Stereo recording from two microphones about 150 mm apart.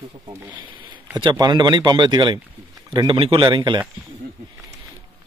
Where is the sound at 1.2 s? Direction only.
30° right (ahead or behind).